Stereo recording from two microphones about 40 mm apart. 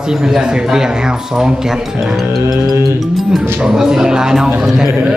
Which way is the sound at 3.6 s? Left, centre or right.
Centre.